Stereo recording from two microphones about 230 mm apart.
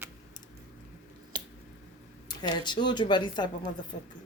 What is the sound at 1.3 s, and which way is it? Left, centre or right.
Squish, right.